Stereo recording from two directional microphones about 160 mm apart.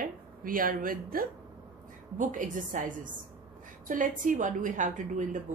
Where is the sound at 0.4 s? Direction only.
60° right (ahead or behind).